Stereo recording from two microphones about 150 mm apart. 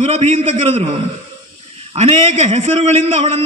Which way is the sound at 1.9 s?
45° right (ahead or behind).